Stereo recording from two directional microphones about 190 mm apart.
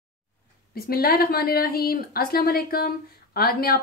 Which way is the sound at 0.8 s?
55° left (ahead or behind).